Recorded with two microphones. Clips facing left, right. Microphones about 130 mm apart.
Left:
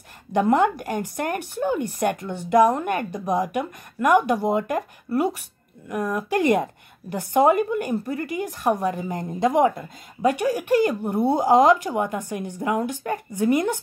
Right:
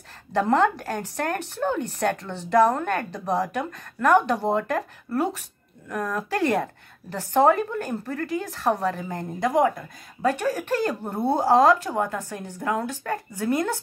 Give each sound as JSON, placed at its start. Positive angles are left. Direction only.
{"t": 0.3, "sound": "a woman's voice", "side_deg": 15}